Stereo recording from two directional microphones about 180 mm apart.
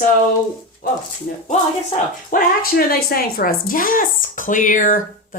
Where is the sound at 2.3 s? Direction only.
55° left (ahead or behind).